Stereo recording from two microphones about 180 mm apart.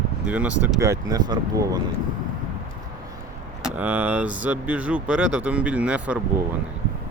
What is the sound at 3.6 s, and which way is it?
Speech, 10° right (ahead or behind).